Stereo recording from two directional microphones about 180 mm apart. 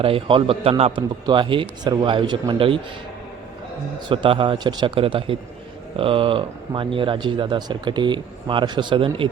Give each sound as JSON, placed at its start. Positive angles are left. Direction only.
{"t": 0.0, "sound": "a man's voice", "side_deg": -30}
{"t": 4.1, "sound": "speech", "side_deg": -30}